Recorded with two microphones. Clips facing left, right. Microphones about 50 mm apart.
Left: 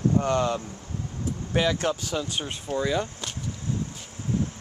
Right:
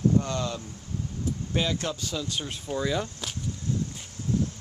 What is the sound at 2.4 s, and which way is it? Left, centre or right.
Speech, centre.